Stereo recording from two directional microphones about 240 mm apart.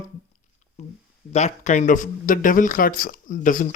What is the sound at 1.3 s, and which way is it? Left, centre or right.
Speech, left.